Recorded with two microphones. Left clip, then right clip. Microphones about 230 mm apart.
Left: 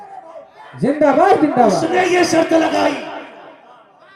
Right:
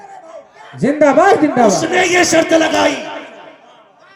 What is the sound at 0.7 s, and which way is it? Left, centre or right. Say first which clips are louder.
Music: right 2 dB; right.